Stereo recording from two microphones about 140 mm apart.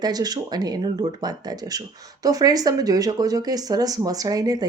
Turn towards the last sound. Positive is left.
turn(degrees=-30)  # may be behind; listen again after turning